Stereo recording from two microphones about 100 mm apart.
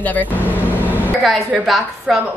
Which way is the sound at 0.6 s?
20° right (ahead or behind).